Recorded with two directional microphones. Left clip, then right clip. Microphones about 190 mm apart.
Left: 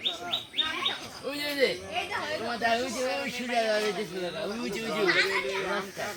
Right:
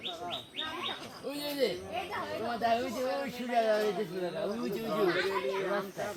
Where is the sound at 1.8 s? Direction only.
25° right (ahead or behind); by 5.9 s 40° right (ahead or behind).